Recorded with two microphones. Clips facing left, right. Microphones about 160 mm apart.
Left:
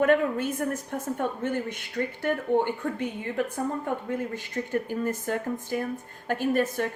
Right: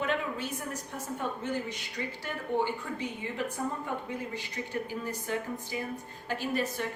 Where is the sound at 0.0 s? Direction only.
50° left (ahead or behind).